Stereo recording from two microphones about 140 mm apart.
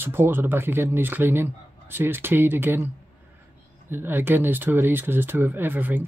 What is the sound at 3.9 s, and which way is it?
Speech, 15° right (ahead or behind).